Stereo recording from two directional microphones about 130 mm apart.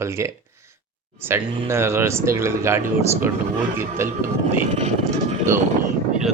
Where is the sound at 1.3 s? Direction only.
20° right (ahead or behind).